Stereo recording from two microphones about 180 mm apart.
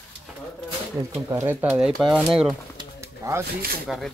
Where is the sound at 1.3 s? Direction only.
10° right (ahead or behind).